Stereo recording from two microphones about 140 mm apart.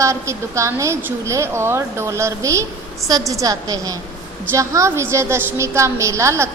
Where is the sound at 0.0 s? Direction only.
20° right (ahead or behind).